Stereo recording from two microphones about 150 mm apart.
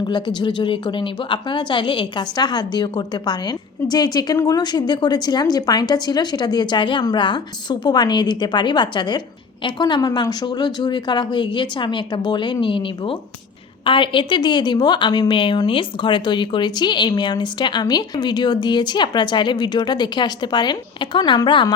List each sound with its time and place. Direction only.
0.0 s a woman's voice: 30° left (ahead or behind)